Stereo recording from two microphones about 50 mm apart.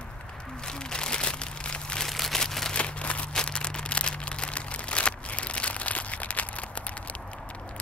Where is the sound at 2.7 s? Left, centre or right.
Left.